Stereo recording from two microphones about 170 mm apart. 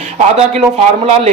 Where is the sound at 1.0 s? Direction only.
35° right (ahead or behind).